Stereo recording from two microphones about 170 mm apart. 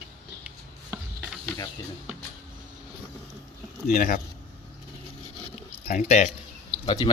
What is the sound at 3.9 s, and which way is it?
Speech, 55° left (ahead or behind).